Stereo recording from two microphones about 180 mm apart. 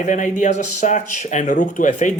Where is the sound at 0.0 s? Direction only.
45° left (ahead or behind).